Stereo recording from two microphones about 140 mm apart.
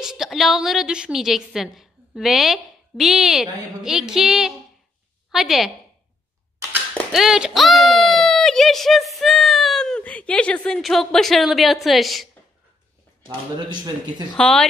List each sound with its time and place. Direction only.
0.0 s a woman's voice: 5° right (ahead or behind)
7.1 s a sound: 5° right (ahead or behind)
13.6 s speech: 30° right (ahead or behind)
14.3 s a woman's voice: 5° left (ahead or behind)